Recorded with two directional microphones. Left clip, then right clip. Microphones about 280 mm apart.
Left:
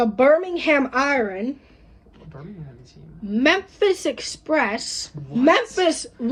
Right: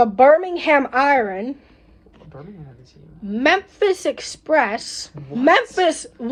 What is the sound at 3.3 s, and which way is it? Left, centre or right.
A woman's voice, centre.